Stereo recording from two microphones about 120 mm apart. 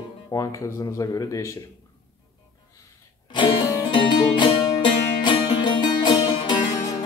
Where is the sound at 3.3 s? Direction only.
45° left (ahead or behind).